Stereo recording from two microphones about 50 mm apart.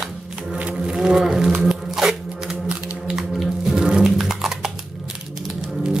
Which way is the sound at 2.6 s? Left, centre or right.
Right.